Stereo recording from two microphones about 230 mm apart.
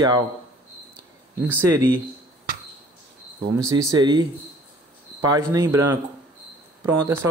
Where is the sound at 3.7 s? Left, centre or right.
Centre.